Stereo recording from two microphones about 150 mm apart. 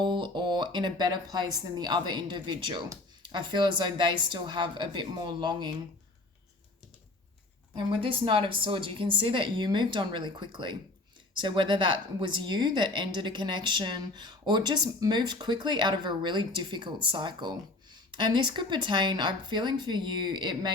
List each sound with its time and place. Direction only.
0.0 s a woman's voice: 30° right (ahead or behind)
7.8 s a woman's voice: 35° right (ahead or behind)